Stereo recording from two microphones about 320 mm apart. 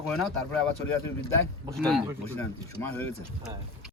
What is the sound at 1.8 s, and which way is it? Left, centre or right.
A man's voice, centre.